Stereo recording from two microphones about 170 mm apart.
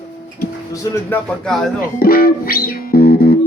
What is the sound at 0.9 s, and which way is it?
Speech, 10° left (ahead or behind).